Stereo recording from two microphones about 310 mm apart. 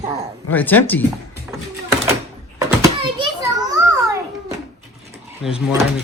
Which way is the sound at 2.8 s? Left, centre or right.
Centre.